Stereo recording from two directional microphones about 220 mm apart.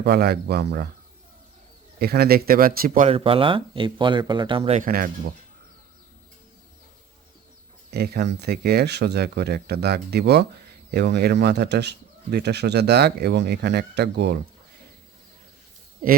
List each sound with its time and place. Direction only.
0.0 s speech: 45° right (ahead or behind)
2.0 s speech: 45° right (ahead or behind)
3.1 s speech: 25° right (ahead or behind)
4.8 s speech: 40° right (ahead or behind)
7.9 s speech: 45° right (ahead or behind)